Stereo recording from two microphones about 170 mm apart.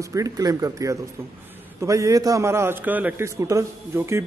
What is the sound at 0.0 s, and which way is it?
A man's voice, 20° right (ahead or behind).